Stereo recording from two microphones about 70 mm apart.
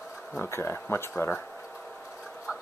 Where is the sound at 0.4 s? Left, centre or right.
Left.